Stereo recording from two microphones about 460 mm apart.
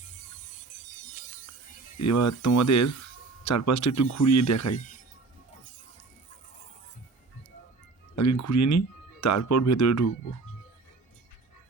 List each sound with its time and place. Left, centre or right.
0.0 s music: centre
2.0 s speech: left
8.1 s speech: left